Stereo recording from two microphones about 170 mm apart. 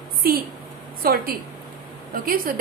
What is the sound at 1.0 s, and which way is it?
A woman's voice, 60° right (ahead or behind).